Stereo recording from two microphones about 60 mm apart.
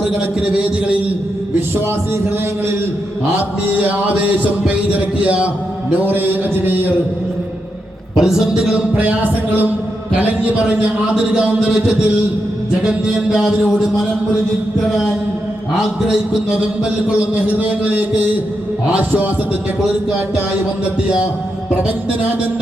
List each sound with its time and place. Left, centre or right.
0.5 s speech: right
3.7 s speech: right
6.0 s music: right
8.1 s a man's voice: centre
9.0 s speech: right
12.8 s a man's voice: centre
15.8 s a man's voice: centre
17.1 s speech: right